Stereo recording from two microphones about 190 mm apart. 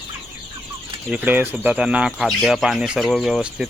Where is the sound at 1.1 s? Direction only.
10° right (ahead or behind).